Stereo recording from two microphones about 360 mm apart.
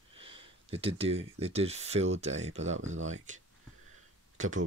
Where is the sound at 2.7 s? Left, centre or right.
Right.